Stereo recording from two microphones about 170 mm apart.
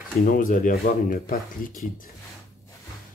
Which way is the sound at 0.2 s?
55° left (ahead or behind).